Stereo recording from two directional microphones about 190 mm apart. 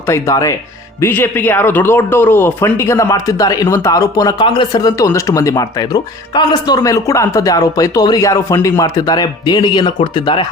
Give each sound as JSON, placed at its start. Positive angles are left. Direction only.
{"t": 0.0, "sound": "speech", "side_deg": 15}